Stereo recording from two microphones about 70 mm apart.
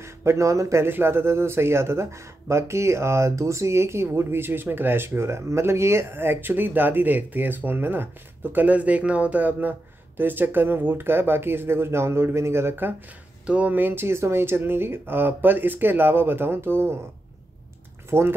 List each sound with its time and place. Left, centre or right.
0.0 s speech: right
0.8 s speech: right
13.5 s speech: centre; by 17.0 s right
18.1 s speech: right